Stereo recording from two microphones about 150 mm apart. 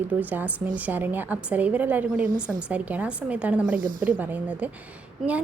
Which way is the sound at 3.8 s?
65° right (ahead or behind).